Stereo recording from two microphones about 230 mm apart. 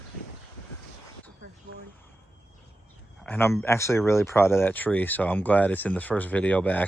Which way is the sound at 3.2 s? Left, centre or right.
Centre.